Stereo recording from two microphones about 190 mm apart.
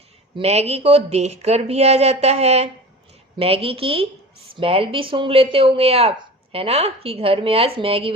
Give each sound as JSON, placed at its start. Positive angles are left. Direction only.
{"t": 0.3, "sound": "a woman's voice", "side_deg": -35}